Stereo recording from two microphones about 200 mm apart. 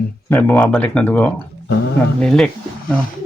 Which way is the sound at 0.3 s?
10° left (ahead or behind).